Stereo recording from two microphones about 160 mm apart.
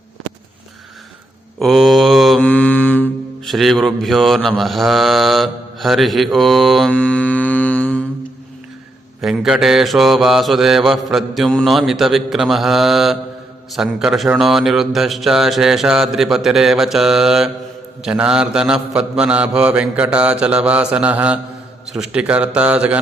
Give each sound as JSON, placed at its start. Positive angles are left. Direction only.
{"t": 1.5, "sound": "mantra", "side_deg": 0}
{"t": 2.5, "sound": "mantra", "side_deg": 10}
{"t": 9.2, "sound": "mantra", "side_deg": -5}